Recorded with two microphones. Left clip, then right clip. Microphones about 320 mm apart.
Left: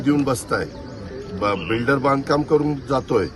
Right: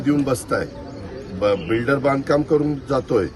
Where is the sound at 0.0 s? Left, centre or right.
Centre.